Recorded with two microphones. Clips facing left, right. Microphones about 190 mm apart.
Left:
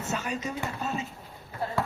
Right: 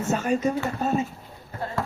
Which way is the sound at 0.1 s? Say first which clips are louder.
Right 9 dB; 50° right (ahead or behind).